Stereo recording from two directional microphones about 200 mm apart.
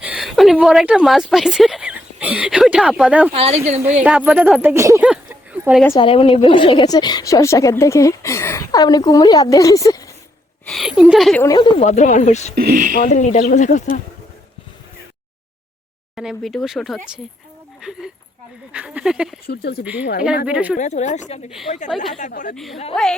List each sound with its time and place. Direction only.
0.0 s a woman's voice: 5° right (ahead or behind)
3.3 s a woman's voice: 30° right (ahead or behind)
4.0 s speech: 5° right (ahead or behind)
5.0 s clip-clop: 5° right (ahead or behind)
5.9 s a woman's voice: 30° left (ahead or behind)
10.7 s speech: centre (ahead or behind)
11.4 s speech: 20° left (ahead or behind)
12.5 s speech: 45° right (ahead or behind)
13.0 s speech: 40° left (ahead or behind)
16.1 s speech: centre (ahead or behind)
19.5 s speech: 55° left (ahead or behind)
19.8 s speech: 5° right (ahead or behind)
20.7 s speech: 35° left (ahead or behind)
22.5 s speech: centre (ahead or behind)